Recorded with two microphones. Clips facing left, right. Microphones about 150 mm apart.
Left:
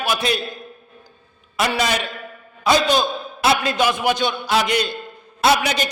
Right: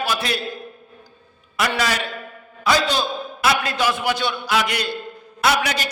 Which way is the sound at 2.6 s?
20° left (ahead or behind).